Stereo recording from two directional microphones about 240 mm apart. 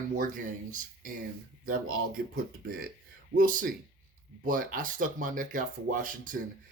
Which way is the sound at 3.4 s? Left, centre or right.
Right.